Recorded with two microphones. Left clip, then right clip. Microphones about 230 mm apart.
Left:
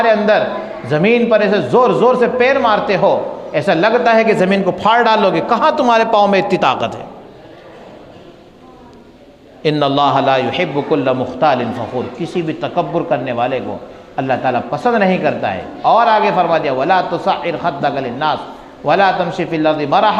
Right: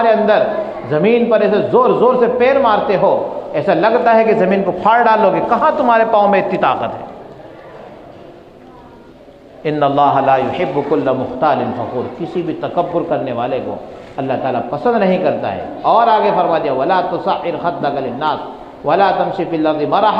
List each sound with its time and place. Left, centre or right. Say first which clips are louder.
0.0 s a man's voice: even; left
9.6 s a man's voice: right 1 dB; left